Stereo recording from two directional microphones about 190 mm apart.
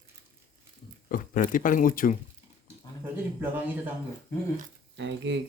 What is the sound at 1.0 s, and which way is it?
Speech, 45° left (ahead or behind).